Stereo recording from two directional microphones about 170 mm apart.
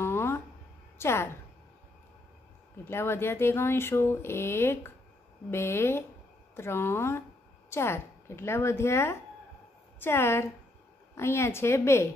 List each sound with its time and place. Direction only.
0.0 s a sound: 15° left (ahead or behind)
0.9 s a woman's voice: 15° left (ahead or behind)
2.8 s speech: 15° left (ahead or behind)